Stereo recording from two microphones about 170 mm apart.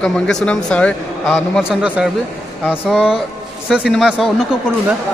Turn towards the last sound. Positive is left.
turn(degrees=-5)  # may be behind; listen again after turning